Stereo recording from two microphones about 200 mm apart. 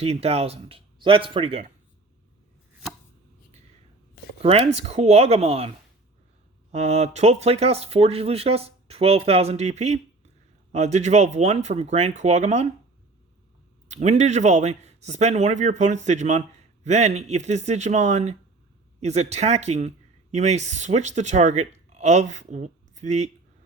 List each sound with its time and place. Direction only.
0.0 s speech: 30° right (ahead or behind)
4.4 s speech: 30° right (ahead or behind)
13.8 s speech: 35° right (ahead or behind)